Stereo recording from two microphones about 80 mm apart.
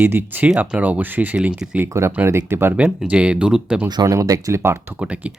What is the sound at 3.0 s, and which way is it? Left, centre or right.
Speech, centre.